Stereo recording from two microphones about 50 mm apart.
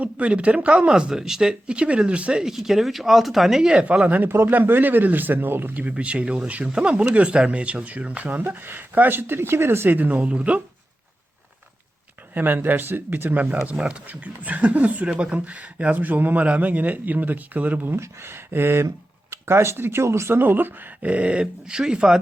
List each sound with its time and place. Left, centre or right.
0.0 s speech: right
2.6 s speech: centre
3.7 s speech: centre
4.3 s speech: right
4.5 s speech: right
5.9 s speech: right
8.5 s speech: right
10.0 s speech: right
12.3 s speech: right
13.7 s speech: centre
14.1 s speech: right
18.0 s speech: right
20.4 s speech: right
21.0 s speech: right